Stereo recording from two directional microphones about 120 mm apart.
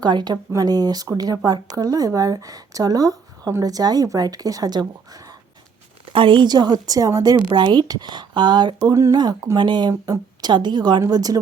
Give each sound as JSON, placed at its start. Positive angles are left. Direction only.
{"t": 0.0, "sound": "a woman's voice", "side_deg": -35}